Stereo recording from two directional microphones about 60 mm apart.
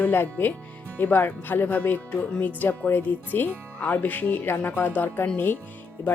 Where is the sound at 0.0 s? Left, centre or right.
Left.